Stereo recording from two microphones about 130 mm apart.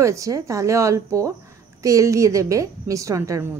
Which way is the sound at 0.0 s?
25° right (ahead or behind).